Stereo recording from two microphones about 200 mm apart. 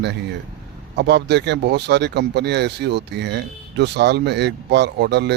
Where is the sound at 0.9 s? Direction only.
55° right (ahead or behind).